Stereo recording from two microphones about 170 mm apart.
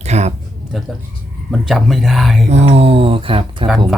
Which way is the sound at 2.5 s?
40° right (ahead or behind).